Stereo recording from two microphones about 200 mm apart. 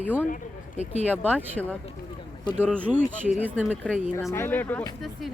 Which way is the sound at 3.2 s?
10° right (ahead or behind).